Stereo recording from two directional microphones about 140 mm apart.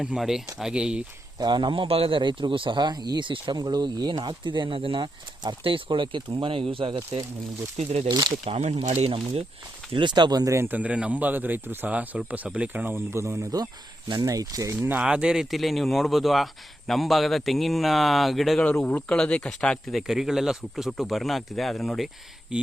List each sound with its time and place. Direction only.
0.0 s speech: 5° right (ahead or behind)
1.4 s a man's voice: 30° right (ahead or behind)
7.8 s speech: 50° right (ahead or behind)
8.0 s speech: 30° right (ahead or behind)
8.4 s speech: 50° right (ahead or behind)
9.0 s a man's voice: 40° right (ahead or behind)
14.8 s speech: 10° right (ahead or behind)